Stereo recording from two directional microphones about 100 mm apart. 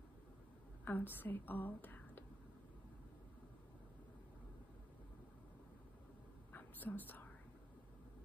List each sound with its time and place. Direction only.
0.8 s a woman's voice: 20° left (ahead or behind)
6.5 s whispering: 20° left (ahead or behind)